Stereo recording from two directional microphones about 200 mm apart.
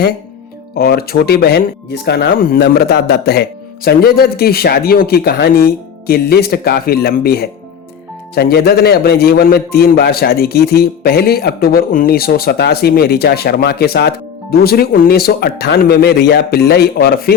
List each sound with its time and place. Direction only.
0.8 s a man's voice: 50° left (ahead or behind)